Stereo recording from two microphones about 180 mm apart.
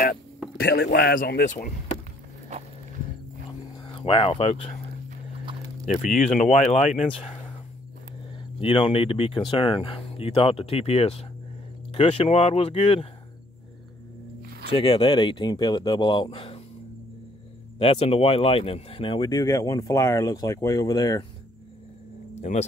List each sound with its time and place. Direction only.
0.6 s a man's voice: 60° left (ahead or behind)
3.7 s speech: 30° left (ahead or behind)
6.3 s speech: 45° left (ahead or behind)
8.5 s speech: 30° left (ahead or behind)
14.8 s speech: 30° left (ahead or behind)
17.7 s speech: 35° left (ahead or behind)
22.4 s speech: 40° left (ahead or behind)